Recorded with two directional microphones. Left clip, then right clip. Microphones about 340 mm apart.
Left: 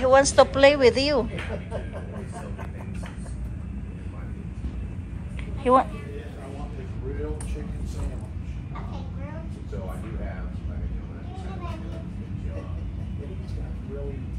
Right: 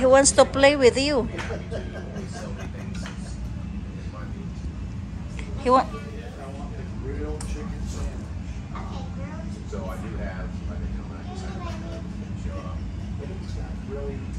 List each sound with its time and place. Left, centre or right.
0.0 s a woman's voice: centre
5.6 s a woman's voice: centre